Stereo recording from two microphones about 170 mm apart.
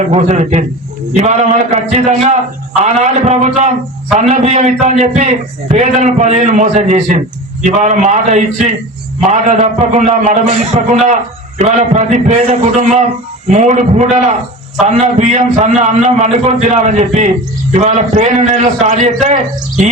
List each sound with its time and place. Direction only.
0.0 s a man's voice: 45° right (ahead or behind)